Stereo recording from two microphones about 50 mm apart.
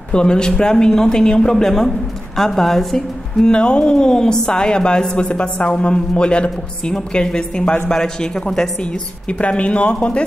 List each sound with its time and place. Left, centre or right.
0.1 s a woman's voice: centre
3.4 s a woman's voice: centre